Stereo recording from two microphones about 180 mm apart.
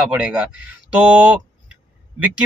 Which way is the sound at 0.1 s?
5° right (ahead or behind).